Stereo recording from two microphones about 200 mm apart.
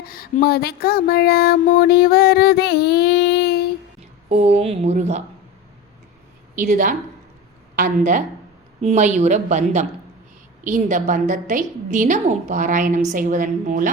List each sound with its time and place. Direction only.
0.1 s a sound: 45° left (ahead or behind)
4.3 s a woman's voice: 35° right (ahead or behind)
6.6 s a woman's voice: 40° right (ahead or behind)